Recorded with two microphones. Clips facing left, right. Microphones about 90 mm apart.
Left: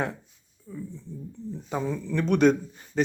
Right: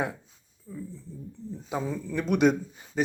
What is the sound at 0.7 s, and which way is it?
Speech, centre (ahead or behind).